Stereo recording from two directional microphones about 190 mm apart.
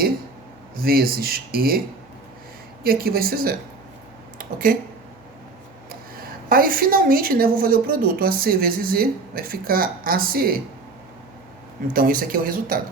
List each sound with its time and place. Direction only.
0.8 s a woman's voice: 50° right (ahead or behind)
2.8 s a woman's voice: 50° right (ahead or behind)
4.4 s a sound: 45° right (ahead or behind)
5.9 s a woman's voice: 50° right (ahead or behind)
11.9 s a woman's voice: 50° right (ahead or behind)